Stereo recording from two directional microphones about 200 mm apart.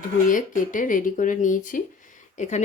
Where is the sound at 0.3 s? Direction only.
40° left (ahead or behind).